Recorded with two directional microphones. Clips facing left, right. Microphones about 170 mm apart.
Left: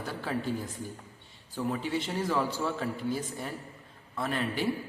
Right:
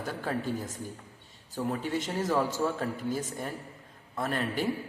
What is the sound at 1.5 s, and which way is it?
A woman's voice, 45° right (ahead or behind).